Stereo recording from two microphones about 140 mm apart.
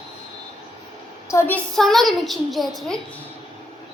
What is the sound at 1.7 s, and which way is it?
A child's voice, centre (ahead or behind).